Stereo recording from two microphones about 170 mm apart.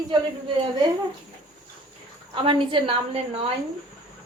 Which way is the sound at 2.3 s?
30° right (ahead or behind).